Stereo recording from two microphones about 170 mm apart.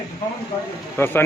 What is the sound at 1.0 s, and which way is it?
Speech, 10° left (ahead or behind).